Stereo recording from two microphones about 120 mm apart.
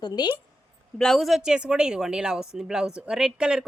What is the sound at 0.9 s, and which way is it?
Speech, 5° left (ahead or behind).